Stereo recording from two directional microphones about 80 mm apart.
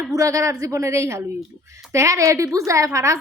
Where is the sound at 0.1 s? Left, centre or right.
Right.